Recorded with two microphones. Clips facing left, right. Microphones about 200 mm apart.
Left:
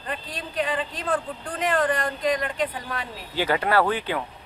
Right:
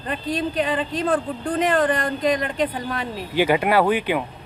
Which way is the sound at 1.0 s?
35° right (ahead or behind).